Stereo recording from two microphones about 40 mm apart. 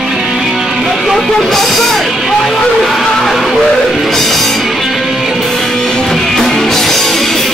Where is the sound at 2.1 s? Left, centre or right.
Centre.